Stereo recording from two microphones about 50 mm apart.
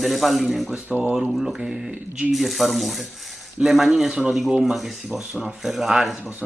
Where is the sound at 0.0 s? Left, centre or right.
Centre.